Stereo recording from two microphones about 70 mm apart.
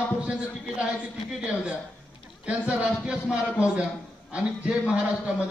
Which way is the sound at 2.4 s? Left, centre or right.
Centre.